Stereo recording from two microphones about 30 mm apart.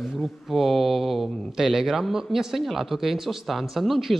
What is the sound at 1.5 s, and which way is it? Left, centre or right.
Speech, centre.